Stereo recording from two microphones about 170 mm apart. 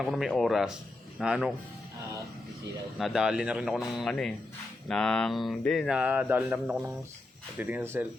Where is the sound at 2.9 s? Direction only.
Centre (ahead or behind).